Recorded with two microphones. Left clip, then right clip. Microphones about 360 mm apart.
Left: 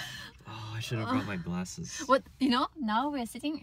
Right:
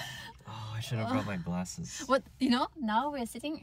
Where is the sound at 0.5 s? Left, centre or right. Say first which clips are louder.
Left 3 dB; centre.